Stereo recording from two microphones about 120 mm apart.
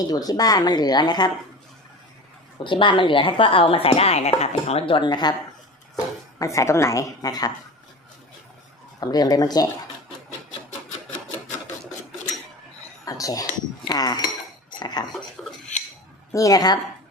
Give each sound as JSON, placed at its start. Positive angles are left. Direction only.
{"t": 0.0, "sound": "a woman's voice", "side_deg": 30}
{"t": 2.6, "sound": "speech", "side_deg": 45}
{"t": 4.9, "sound": "a woman's voice", "side_deg": 40}
{"t": 6.4, "sound": "a woman's voice", "side_deg": 25}
{"t": 9.0, "sound": "a woman's voice", "side_deg": 35}
{"t": 13.1, "sound": "speech", "side_deg": 30}
{"t": 15.4, "sound": "dishes", "side_deg": 5}
{"t": 16.3, "sound": "a woman's voice", "side_deg": 30}